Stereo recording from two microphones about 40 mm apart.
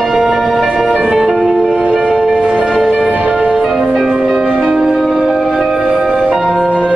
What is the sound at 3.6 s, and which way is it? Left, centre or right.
Music, centre.